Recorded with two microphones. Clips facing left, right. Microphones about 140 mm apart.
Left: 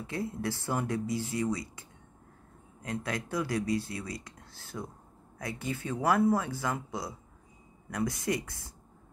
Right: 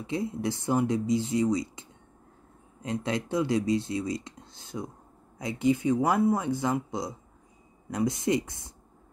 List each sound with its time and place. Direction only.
0.0 s speech: 20° right (ahead or behind)